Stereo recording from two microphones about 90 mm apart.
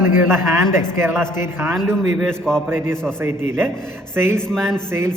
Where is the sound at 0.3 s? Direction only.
30° right (ahead or behind).